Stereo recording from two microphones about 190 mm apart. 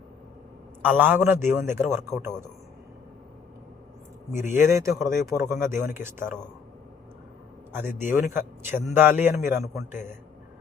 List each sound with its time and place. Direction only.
0.9 s speech: 10° right (ahead or behind)
4.4 s speech: 15° right (ahead or behind)
7.7 s speech: 10° right (ahead or behind)